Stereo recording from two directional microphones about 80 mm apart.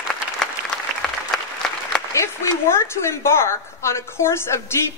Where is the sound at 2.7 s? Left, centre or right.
Left.